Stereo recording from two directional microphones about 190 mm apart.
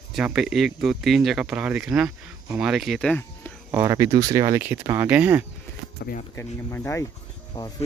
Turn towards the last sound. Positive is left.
turn(degrees=25)  # may be behind; listen again after turning